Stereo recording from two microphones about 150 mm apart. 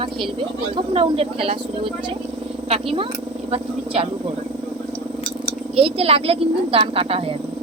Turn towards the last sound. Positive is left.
turn(degrees=-40)  # may be behind; listen again after turning